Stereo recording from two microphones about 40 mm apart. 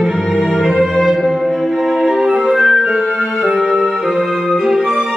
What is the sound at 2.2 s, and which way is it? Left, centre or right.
Music, centre.